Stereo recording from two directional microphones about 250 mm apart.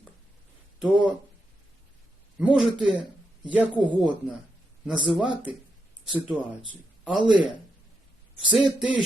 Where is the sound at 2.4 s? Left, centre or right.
Centre.